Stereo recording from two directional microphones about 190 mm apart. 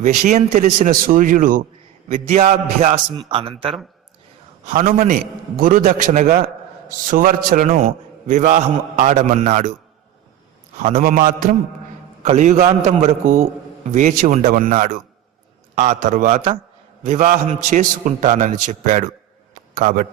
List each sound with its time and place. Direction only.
0.0 s a man's voice: 40° right (ahead or behind)
2.9 s a man's voice: 25° right (ahead or behind)
10.8 s a man's voice: 45° right (ahead or behind)
12.2 s a man's voice: 40° right (ahead or behind)